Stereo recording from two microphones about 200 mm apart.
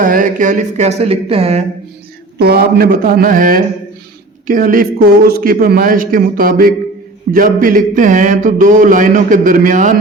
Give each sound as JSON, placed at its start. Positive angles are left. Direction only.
{"t": 0.0, "sound": "speech", "side_deg": -40}
{"t": 2.4, "sound": "a man's voice", "side_deg": -50}